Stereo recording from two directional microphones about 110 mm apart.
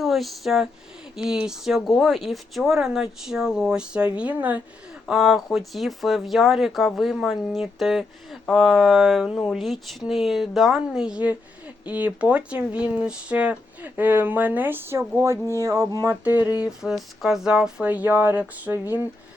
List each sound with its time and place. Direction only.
0.0 s speech: centre (ahead or behind); by 4.6 s 15° right (ahead or behind)
5.0 s speech: centre (ahead or behind); by 15.0 s 20° right (ahead or behind)
15.2 s a sound: 25° right (ahead or behind)
16.2 s speech: 15° right (ahead or behind)
16.6 s speech: centre (ahead or behind); by 19.0 s 15° right (ahead or behind)